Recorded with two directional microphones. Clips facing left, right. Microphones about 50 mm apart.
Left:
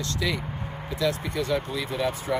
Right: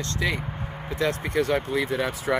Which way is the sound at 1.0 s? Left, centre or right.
Right.